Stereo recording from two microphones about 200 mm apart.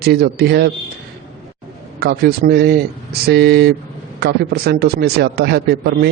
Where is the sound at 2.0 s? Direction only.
55° right (ahead or behind).